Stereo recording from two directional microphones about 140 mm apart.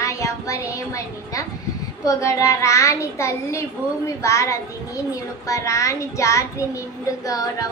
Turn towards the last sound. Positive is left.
turn(degrees=25)  # may be behind; listen again after turning